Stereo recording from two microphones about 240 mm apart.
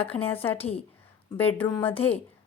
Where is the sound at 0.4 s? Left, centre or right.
Centre.